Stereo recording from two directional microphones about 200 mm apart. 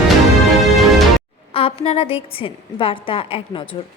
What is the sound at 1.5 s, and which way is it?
A woman's voice, 30° left (ahead or behind).